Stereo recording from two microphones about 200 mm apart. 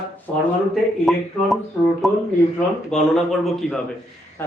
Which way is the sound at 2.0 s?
Centre (ahead or behind).